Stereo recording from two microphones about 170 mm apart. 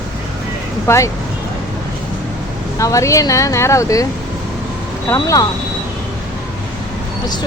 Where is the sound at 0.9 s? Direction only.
15° left (ahead or behind).